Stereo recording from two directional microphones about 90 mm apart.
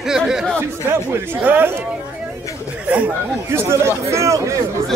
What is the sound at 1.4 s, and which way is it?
Speech, 20° right (ahead or behind).